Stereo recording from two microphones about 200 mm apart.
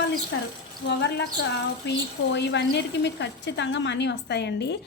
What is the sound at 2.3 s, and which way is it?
A woman's voice, 60° left (ahead or behind).